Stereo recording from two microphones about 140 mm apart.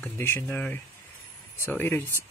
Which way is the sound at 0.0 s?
15° left (ahead or behind).